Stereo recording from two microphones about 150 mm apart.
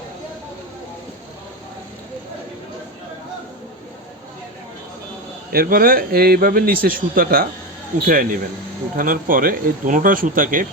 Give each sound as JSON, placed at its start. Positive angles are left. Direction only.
{"t": 5.5, "sound": "speech", "side_deg": -75}